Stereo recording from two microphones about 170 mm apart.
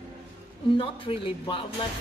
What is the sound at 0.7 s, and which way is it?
Speech, 30° left (ahead or behind).